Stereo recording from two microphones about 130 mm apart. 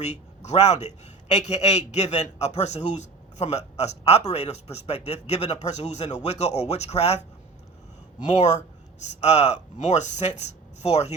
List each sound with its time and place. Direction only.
0.0 s a man's voice: 60° left (ahead or behind)
9.0 s a man's voice: 60° left (ahead or behind)